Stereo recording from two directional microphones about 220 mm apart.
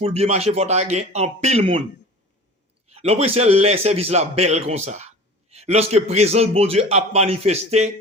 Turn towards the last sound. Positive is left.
turn(degrees=-30)  # may be behind; listen again after turning